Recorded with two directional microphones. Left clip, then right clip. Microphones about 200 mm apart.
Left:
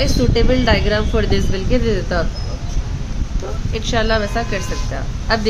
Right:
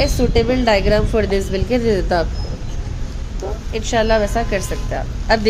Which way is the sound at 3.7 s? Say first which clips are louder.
Right 2 dB; 10° right (ahead or behind).